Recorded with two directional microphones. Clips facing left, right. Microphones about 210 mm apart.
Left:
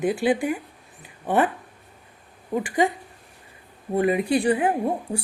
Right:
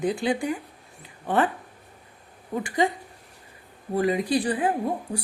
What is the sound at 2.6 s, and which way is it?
Speech, 20° left (ahead or behind).